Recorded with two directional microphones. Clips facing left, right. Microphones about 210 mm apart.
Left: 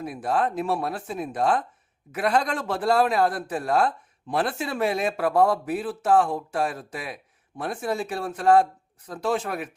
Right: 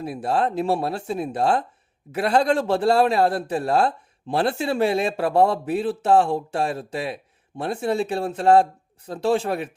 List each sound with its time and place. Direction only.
0.0 s a man's voice: 30° right (ahead or behind)